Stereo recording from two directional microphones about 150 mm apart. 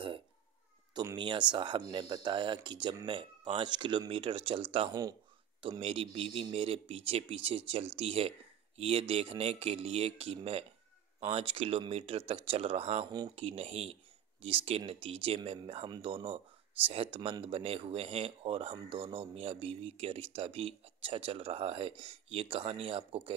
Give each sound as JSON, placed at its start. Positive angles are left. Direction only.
{"t": 0.9, "sound": "speech", "side_deg": -30}